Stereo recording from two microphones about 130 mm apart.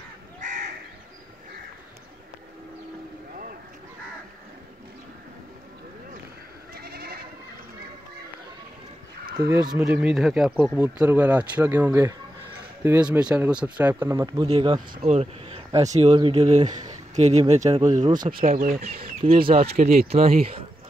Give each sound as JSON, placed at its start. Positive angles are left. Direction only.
{"t": 0.4, "sound": "crow", "side_deg": -75}
{"t": 9.5, "sound": "speech", "side_deg": -25}
{"t": 10.0, "sound": "speech", "side_deg": 0}
{"t": 10.8, "sound": "speech", "side_deg": -10}
{"t": 14.5, "sound": "speech", "side_deg": -50}
{"t": 16.2, "sound": "speech", "side_deg": -40}
{"t": 16.4, "sound": "speech", "side_deg": -65}
{"t": 18.3, "sound": "speech", "side_deg": -75}